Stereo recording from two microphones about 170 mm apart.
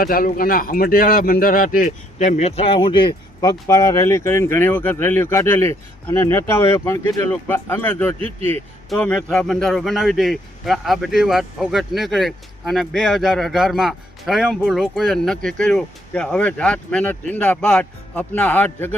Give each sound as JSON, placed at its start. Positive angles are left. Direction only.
{"t": 0.0, "sound": "a man's voice", "side_deg": 60}